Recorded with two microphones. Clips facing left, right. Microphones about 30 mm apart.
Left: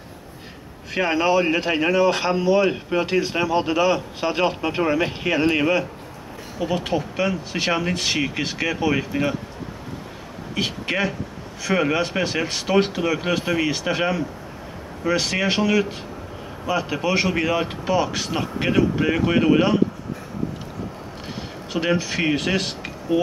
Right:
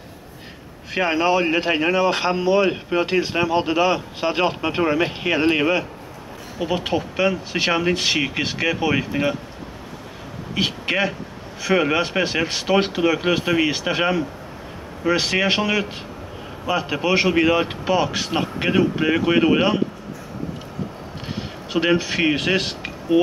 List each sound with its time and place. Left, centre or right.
0.9 s speech: centre
10.5 s speech: centre
21.7 s speech: centre